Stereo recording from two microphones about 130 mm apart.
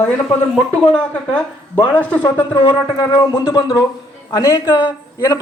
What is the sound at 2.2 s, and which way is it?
A man's voice, 35° left (ahead or behind).